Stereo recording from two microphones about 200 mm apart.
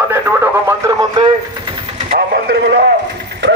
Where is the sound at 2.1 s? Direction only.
50° right (ahead or behind).